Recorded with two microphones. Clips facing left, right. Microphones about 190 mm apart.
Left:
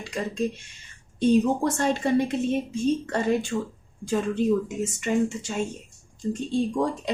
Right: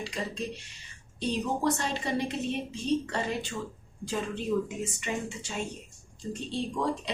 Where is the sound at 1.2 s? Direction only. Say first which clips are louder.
Left 8 dB; 50° left (ahead or behind).